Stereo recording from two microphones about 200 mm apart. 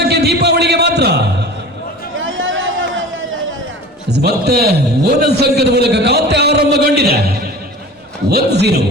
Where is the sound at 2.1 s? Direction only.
75° right (ahead or behind).